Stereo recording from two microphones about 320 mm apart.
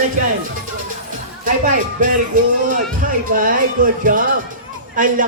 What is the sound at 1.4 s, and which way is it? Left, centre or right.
Speech, right.